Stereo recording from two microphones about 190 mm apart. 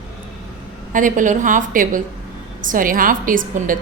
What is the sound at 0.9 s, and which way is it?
A woman's voice, 45° right (ahead or behind).